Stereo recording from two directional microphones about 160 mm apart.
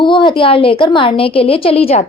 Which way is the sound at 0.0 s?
30° left (ahead or behind).